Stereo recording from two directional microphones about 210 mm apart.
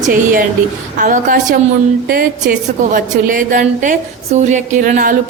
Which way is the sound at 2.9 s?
40° right (ahead or behind).